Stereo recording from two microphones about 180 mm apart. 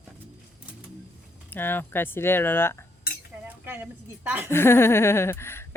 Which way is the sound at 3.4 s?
10° right (ahead or behind).